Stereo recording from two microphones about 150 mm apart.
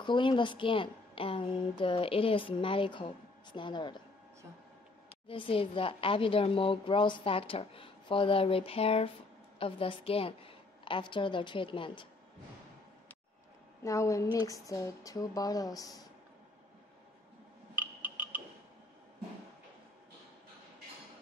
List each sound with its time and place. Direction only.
0.0 s a woman's voice: 30° left (ahead or behind)
5.3 s a woman's voice: 35° left (ahead or behind)
13.8 s speech: 20° left (ahead or behind)
17.7 s music: 10° right (ahead or behind)